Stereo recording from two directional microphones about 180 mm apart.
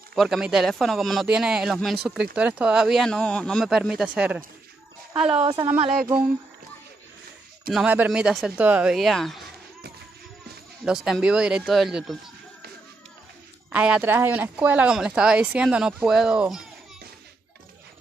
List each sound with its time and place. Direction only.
0.1 s speech: centre (ahead or behind)
5.1 s a woman's voice: 30° right (ahead or behind)
7.7 s speech: 10° right (ahead or behind)
10.9 s speech: 5° right (ahead or behind)
13.7 s speech: 5° right (ahead or behind)